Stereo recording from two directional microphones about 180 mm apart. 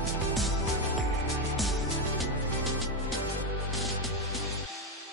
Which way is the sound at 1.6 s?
Centre (ahead or behind).